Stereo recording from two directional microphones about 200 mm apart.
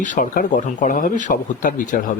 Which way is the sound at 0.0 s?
40° left (ahead or behind).